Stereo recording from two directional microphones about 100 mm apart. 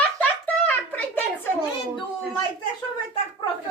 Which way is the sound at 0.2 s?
20° left (ahead or behind).